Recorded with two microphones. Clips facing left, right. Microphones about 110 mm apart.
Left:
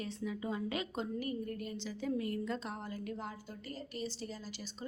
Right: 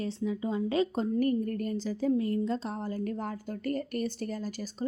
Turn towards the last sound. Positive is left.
turn(degrees=-45)  # may be behind; listen again after turning